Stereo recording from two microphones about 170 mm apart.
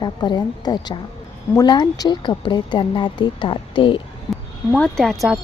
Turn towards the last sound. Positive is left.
turn(degrees=0)  # may be behind; listen again after turning